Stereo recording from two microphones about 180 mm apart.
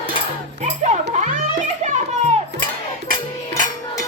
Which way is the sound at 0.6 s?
40° right (ahead or behind).